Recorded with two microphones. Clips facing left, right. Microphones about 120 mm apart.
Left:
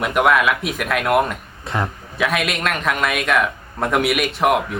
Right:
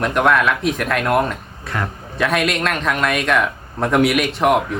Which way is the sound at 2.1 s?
Centre (ahead or behind).